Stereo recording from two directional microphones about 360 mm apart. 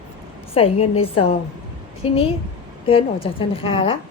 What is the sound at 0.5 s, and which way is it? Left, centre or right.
A woman's voice, centre.